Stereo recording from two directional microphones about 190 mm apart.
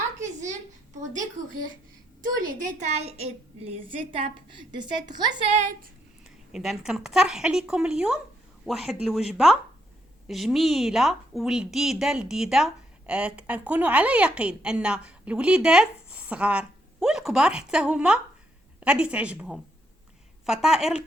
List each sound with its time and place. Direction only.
2.5 s a woman's voice: 40° right (ahead or behind); by 5.5 s 20° right (ahead or behind)
6.2 s a woman's voice: centre (ahead or behind)